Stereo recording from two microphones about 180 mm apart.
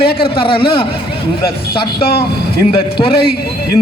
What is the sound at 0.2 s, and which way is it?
Speech, 30° left (ahead or behind).